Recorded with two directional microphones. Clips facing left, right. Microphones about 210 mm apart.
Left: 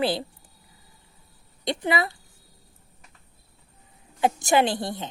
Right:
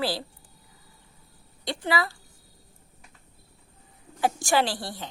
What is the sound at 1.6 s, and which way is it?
Speech, 20° left (ahead or behind).